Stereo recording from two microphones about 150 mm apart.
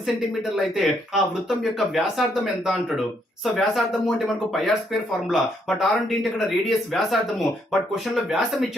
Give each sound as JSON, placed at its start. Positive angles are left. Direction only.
{"t": 0.5, "sound": "speech", "side_deg": 0}
{"t": 5.3, "sound": "speech", "side_deg": 0}